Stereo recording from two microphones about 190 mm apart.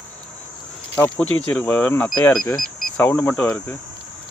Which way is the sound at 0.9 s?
5° left (ahead or behind).